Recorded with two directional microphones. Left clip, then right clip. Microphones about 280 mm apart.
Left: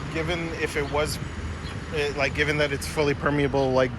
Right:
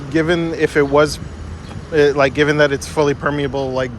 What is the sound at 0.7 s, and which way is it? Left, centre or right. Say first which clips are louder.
Speech: right 15 dB; centre.